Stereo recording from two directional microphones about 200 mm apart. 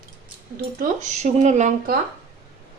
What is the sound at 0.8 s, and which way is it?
Speech, 35° right (ahead or behind).